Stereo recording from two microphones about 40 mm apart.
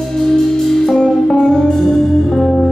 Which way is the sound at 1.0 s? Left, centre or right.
Centre.